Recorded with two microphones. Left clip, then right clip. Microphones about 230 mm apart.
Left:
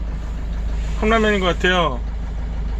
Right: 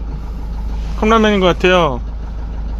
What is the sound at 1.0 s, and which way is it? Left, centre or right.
Speech, right.